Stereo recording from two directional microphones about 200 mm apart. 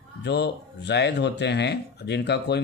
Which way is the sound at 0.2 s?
55° left (ahead or behind).